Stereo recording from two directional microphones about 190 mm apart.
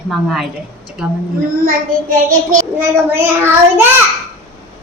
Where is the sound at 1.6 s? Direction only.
45° right (ahead or behind).